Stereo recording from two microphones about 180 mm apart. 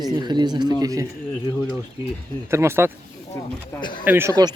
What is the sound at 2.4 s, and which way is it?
Speech, 15° right (ahead or behind).